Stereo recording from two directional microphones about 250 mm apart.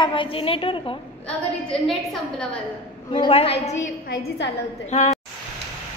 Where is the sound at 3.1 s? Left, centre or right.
Left.